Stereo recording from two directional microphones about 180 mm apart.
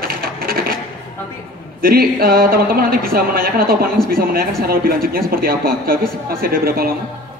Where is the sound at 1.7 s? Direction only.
55° right (ahead or behind).